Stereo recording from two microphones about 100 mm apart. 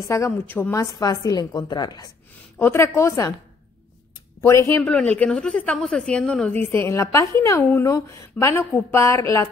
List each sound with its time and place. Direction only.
0.5 s a woman's voice: 25° left (ahead or behind)
0.9 s a woman's voice: 40° left (ahead or behind)
2.6 s a woman's voice: 25° left (ahead or behind)
4.5 s a woman's voice: 30° left (ahead or behind)
4.8 s a woman's voice: 15° left (ahead or behind)
6.7 s a woman's voice: 25° left (ahead or behind)